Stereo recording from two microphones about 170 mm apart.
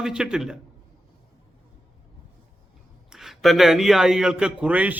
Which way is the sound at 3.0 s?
Centre (ahead or behind).